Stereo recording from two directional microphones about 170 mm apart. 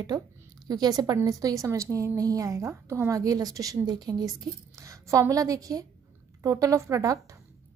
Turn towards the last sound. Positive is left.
turn(degrees=-20)  # may be behind; listen again after turning